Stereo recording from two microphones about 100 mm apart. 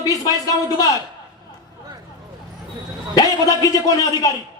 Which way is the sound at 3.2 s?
35° left (ahead or behind).